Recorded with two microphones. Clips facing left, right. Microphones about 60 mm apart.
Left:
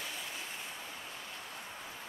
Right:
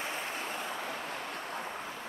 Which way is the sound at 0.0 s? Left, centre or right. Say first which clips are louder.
Right 6 dB; right.